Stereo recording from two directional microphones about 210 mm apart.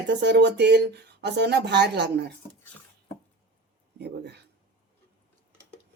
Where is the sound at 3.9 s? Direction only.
50° right (ahead or behind).